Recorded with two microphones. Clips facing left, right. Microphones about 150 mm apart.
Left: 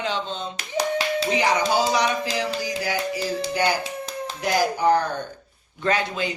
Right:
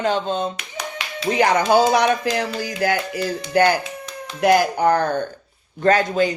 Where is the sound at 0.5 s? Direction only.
35° left (ahead or behind).